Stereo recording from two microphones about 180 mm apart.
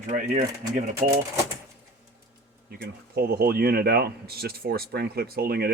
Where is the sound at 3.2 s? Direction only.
60° right (ahead or behind).